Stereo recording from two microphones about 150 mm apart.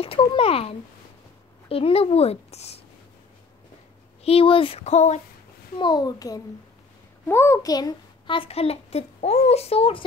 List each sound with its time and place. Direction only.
0.0 s a child's voice: 40° left (ahead or behind)
4.2 s speech: 40° left (ahead or behind)
5.8 s a child's voice: 30° left (ahead or behind)